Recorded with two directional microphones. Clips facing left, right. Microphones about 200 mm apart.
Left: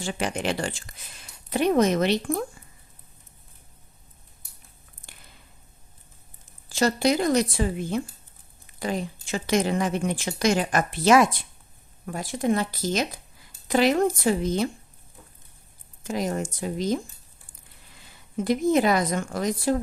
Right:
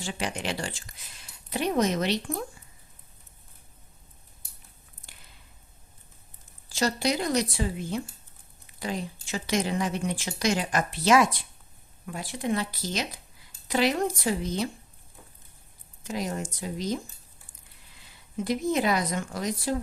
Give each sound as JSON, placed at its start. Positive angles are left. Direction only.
{"t": 0.0, "sound": "speech", "side_deg": 55}
{"t": 6.7, "sound": "speech", "side_deg": 55}
{"t": 16.0, "sound": "speech", "side_deg": 50}
{"t": 18.4, "sound": "speech", "side_deg": 50}